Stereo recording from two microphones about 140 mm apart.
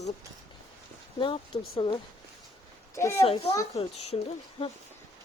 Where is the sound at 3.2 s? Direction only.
45° left (ahead or behind).